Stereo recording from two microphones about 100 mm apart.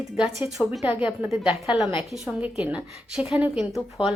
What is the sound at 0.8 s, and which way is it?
A woman's voice, 15° right (ahead or behind).